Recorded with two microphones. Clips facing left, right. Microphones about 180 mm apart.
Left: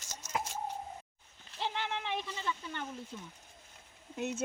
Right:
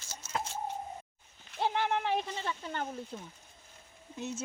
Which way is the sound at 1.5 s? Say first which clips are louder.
Right 6 dB; 50° right (ahead or behind).